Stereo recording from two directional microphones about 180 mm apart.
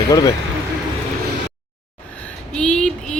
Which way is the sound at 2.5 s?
5° left (ahead or behind).